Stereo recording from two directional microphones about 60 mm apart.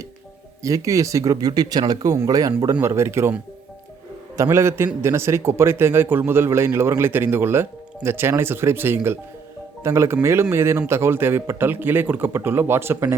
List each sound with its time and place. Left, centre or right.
0.6 s speech: right
2.8 s a man's voice: right
4.5 s a man's voice: right
9.8 s a man's voice: right